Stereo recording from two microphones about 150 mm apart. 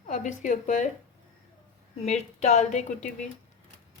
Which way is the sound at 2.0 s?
50° left (ahead or behind).